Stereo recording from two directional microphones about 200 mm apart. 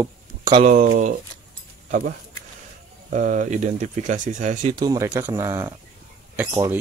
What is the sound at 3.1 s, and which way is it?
Speech, 40° right (ahead or behind).